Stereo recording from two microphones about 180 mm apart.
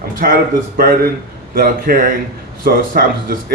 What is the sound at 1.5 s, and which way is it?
A man's voice, 55° right (ahead or behind).